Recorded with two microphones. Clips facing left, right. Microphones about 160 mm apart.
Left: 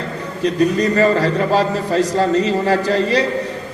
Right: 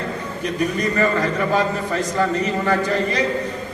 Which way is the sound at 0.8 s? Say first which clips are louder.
Left 5 dB; 35° left (ahead or behind).